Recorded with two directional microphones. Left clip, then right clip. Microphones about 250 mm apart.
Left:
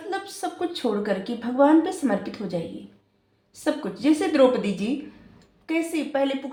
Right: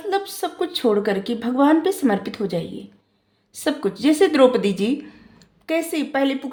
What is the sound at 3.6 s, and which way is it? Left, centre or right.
A woman's voice, right.